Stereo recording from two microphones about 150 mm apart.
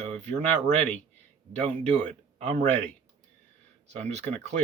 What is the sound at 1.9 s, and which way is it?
Speech, 50° right (ahead or behind).